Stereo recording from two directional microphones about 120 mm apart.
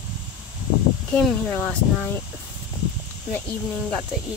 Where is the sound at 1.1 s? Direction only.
15° left (ahead or behind).